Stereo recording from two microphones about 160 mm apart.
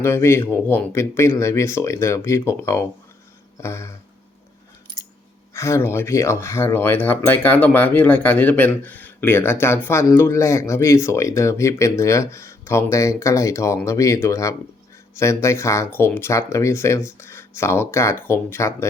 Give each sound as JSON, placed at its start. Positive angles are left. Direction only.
{"t": 0.0, "sound": "speech", "side_deg": 15}
{"t": 5.5, "sound": "speech", "side_deg": 15}